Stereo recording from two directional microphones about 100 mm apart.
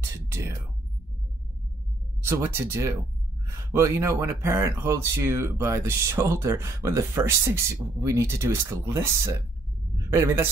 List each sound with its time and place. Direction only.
0.3 s speech: 25° right (ahead or behind)
2.2 s speech: 25° right (ahead or behind)